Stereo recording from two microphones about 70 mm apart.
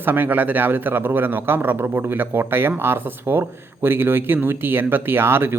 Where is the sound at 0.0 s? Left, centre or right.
Right.